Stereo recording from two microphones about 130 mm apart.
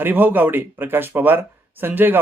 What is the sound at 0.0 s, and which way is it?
Speech, 15° right (ahead or behind).